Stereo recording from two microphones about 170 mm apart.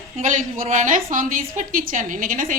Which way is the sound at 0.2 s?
45° right (ahead or behind).